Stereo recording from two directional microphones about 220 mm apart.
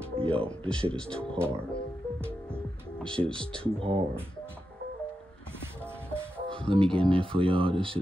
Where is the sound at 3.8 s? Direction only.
25° right (ahead or behind).